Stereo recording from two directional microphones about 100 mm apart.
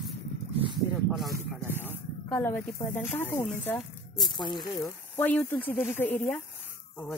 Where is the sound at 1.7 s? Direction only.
25° left (ahead or behind).